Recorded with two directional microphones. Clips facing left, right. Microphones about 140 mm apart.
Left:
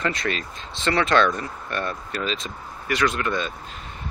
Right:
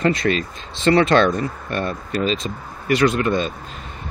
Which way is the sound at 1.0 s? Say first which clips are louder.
Right 4 dB; 35° right (ahead or behind).